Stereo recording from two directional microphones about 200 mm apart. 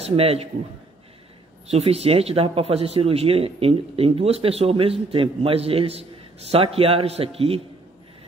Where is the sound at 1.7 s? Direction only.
30° right (ahead or behind).